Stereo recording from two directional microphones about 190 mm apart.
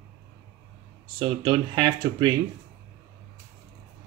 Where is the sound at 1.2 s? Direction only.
25° right (ahead or behind).